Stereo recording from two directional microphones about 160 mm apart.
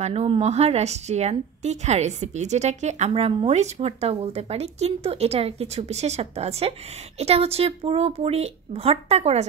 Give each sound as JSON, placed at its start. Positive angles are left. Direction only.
{"t": 0.0, "sound": "a woman's voice", "side_deg": -40}